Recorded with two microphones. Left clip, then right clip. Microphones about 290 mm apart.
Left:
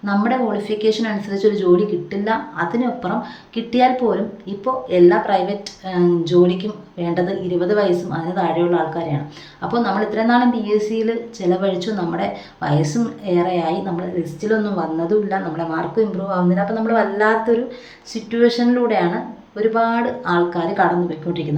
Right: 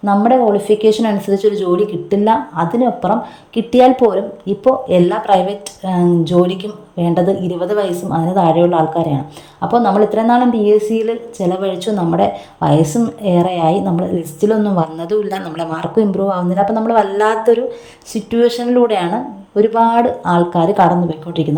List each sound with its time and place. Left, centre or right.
0.0 s a woman's voice: centre